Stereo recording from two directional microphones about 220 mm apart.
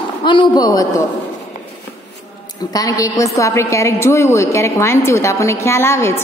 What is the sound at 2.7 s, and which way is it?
A woman's voice, 15° left (ahead or behind).